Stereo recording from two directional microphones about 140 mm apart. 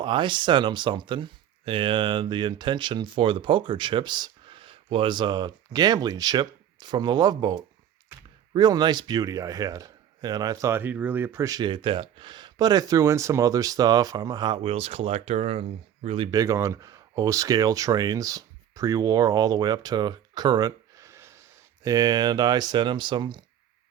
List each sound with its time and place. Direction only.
0.0 s a man's voice: 35° right (ahead or behind)
14.6 s speech: 45° right (ahead or behind)
16.3 s speech: 25° right (ahead or behind)